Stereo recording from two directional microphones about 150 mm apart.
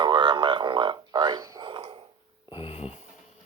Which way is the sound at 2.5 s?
40° left (ahead or behind).